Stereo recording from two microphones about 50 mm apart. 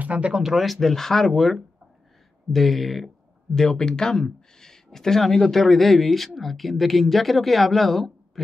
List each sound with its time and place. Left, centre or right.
0.0 s speech: right
0.4 s speech: centre